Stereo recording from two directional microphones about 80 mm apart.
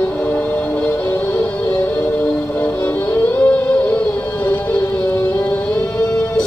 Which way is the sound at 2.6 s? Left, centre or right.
Left.